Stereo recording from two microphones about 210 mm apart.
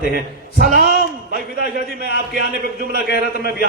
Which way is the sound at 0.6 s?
45° right (ahead or behind).